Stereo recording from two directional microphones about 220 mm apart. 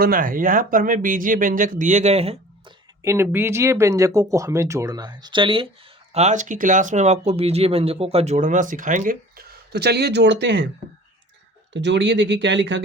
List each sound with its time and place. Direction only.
0.0 s speech: 40° right (ahead or behind)
3.0 s speech: 10° right (ahead or behind); by 10.7 s 55° right (ahead or behind)
11.7 s speech: 55° right (ahead or behind)